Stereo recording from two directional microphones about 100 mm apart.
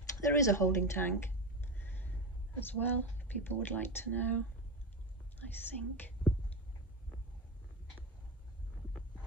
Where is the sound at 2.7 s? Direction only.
15° left (ahead or behind).